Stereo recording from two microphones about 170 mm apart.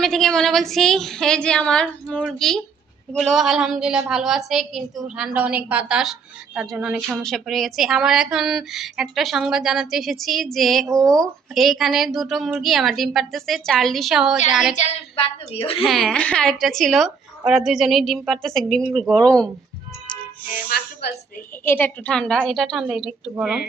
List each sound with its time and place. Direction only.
0.0 s a woman's voice: centre (ahead or behind)
10.8 s speech: 20° right (ahead or behind)
11.1 s a woman's voice: centre (ahead or behind)
14.8 s a woman's voice: 35° left (ahead or behind)
15.8 s a woman's voice: centre (ahead or behind)
20.5 s speech: 60° left (ahead or behind)
21.6 s a woman's voice: 10° left (ahead or behind); by 23.6 s 5° right (ahead or behind)